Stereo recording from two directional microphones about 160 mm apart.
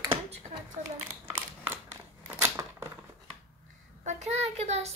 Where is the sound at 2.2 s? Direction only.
15° right (ahead or behind).